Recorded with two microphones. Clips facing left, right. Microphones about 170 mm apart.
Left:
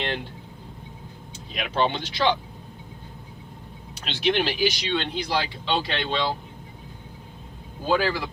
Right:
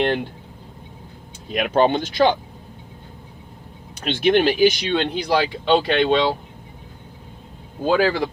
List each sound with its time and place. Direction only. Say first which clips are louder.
1.5 s speech: right 7 dB; 50° right (ahead or behind)
4.0 s speech: right 7 dB; 50° right (ahead or behind)
7.9 s speech: right 5 dB; 55° right (ahead or behind)